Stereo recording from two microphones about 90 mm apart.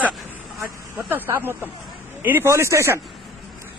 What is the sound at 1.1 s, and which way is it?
A man's voice, 20° right (ahead or behind).